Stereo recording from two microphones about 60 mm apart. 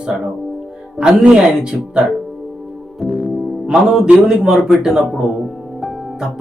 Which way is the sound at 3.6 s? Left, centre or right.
Centre.